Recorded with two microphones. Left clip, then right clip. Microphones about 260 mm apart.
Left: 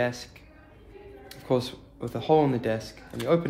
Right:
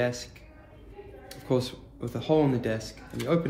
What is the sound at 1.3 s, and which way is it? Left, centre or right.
Speech, left.